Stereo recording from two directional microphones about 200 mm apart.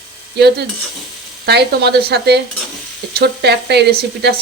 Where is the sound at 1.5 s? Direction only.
55° right (ahead or behind).